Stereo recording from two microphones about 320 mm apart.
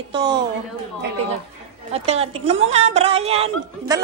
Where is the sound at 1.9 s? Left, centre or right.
Centre.